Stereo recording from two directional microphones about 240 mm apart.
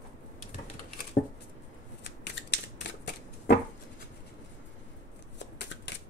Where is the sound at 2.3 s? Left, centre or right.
Left.